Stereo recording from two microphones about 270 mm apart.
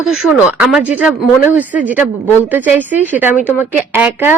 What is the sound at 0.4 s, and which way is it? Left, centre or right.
Speech, centre.